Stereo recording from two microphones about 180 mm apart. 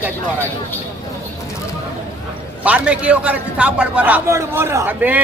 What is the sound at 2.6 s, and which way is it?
A man's voice, 5° right (ahead or behind).